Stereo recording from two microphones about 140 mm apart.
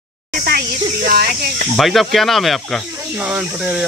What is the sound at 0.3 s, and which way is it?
Speech, 90° right.